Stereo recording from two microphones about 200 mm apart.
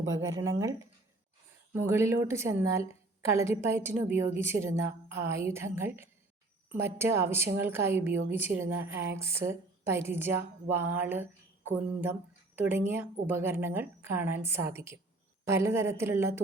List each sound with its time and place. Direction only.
0.6 s a woman's voice: 15° right (ahead or behind)